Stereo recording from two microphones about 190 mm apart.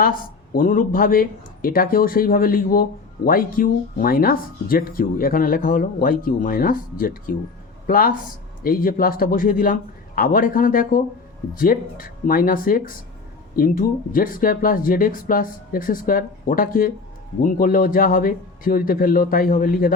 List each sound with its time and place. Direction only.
0.0 s speech: 45° left (ahead or behind)